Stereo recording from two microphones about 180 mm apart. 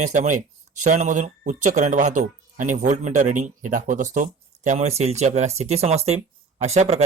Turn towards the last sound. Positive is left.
turn(degrees=-35)  # may be behind; listen again after turning